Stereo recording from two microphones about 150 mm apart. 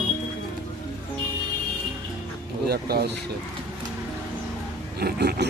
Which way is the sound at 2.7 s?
90° right.